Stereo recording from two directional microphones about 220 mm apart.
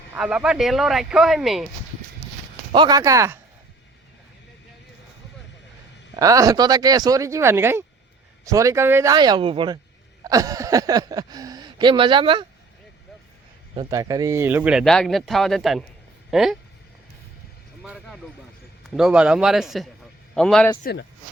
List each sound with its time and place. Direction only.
0.1 s speech: 5° right (ahead or behind)
2.7 s speech: 20° right (ahead or behind)
6.1 s speech: 15° right (ahead or behind)
13.7 s speech: 15° right (ahead or behind)
17.8 s speech: centre (ahead or behind)
20.8 s speech: 50° left (ahead or behind)